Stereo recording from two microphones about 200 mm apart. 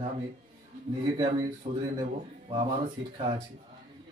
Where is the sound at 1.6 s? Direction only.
45° right (ahead or behind).